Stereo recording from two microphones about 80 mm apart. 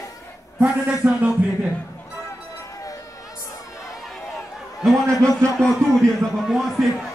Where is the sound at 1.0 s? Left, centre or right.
Right.